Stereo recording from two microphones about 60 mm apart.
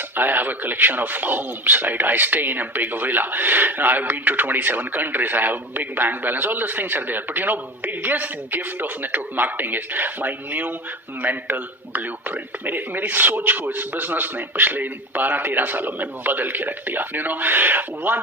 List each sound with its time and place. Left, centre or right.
0.2 s a man's voice: right